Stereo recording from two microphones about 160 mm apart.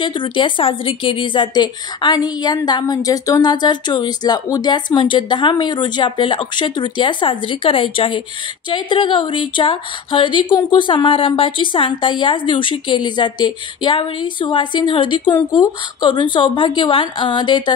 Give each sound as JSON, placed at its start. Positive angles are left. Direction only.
{"t": 0.0, "sound": "speech", "side_deg": 30}